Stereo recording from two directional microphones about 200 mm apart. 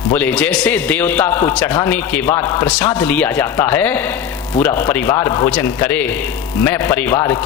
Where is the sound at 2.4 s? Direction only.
20° left (ahead or behind).